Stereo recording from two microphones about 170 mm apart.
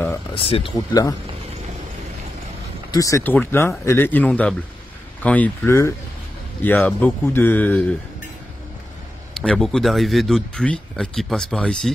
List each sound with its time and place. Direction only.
0.3 s speech: 30° left (ahead or behind)
0.7 s speech: 20° left (ahead or behind)
2.9 s speech: 20° left (ahead or behind)
9.3 s speech: 5° left (ahead or behind)